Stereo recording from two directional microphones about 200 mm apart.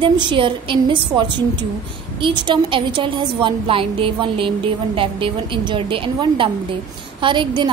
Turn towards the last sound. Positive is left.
turn(degrees=-25)  # may be behind; listen again after turning